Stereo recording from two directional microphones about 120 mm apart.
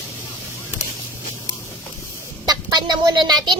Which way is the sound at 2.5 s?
35° right (ahead or behind).